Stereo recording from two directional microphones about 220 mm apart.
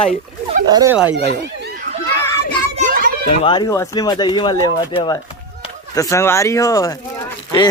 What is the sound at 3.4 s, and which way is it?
Speech, 20° left (ahead or behind).